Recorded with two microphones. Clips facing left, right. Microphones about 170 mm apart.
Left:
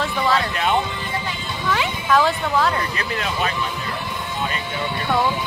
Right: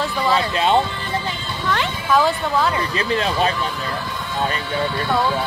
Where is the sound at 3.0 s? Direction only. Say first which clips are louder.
Right 5 dB; 25° right (ahead or behind).